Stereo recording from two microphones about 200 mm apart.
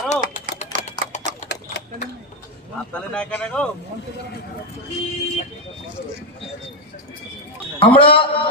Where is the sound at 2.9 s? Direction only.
5° left (ahead or behind).